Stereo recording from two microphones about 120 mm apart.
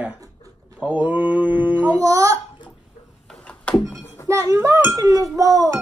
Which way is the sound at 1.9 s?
25° right (ahead or behind).